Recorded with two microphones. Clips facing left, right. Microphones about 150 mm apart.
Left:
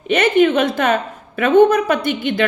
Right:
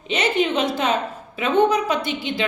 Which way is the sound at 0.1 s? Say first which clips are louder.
Left 7 dB; 55° left (ahead or behind).